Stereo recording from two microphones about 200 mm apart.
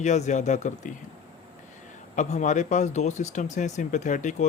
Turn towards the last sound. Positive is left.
turn(degrees=40)  # may be behind; listen again after turning